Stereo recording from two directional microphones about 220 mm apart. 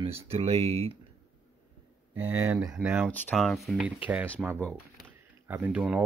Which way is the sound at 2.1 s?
10° right (ahead or behind).